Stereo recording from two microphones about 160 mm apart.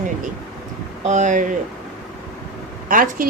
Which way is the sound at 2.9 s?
60° right (ahead or behind).